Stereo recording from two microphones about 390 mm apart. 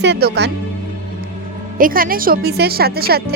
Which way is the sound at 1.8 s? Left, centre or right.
Right.